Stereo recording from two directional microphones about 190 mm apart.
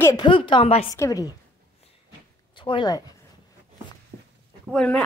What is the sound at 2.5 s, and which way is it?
Speech, 25° left (ahead or behind).